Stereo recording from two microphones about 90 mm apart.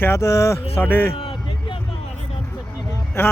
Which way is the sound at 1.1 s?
85° left.